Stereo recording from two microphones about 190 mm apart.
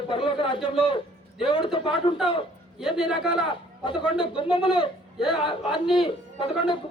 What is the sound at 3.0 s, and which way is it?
A man's voice, 25° left (ahead or behind).